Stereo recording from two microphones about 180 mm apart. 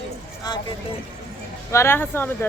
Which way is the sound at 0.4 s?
20° left (ahead or behind).